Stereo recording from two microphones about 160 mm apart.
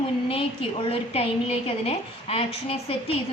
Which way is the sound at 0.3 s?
35° left (ahead or behind).